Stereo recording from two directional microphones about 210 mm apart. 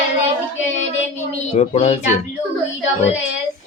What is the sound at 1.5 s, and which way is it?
Child singing, 30° left (ahead or behind).